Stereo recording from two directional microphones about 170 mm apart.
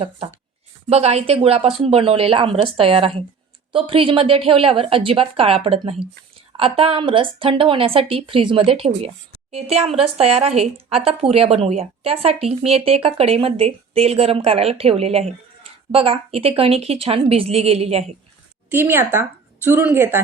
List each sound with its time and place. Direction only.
0.9 s speech: 40° right (ahead or behind)
18.7 s a woman's voice: 15° right (ahead or behind)